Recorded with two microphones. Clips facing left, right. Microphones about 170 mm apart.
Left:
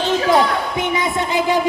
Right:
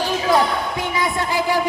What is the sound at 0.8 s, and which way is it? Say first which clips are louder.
Music: left 4 dB; 20° left (ahead or behind).